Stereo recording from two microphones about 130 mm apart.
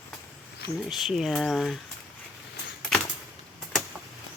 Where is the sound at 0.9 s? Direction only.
Centre (ahead or behind).